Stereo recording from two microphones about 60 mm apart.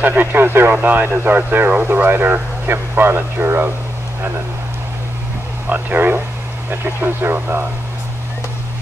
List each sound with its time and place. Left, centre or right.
0.0 s speech: right
5.7 s speech: right